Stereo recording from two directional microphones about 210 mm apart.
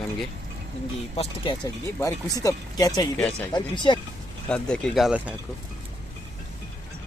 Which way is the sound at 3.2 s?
5° left (ahead or behind).